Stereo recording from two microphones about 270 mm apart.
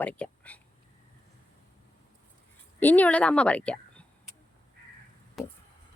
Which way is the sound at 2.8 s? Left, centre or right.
Centre.